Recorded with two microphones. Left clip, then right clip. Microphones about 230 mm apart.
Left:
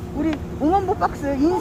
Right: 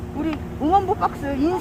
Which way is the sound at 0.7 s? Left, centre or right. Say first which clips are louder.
Right 2 dB; centre.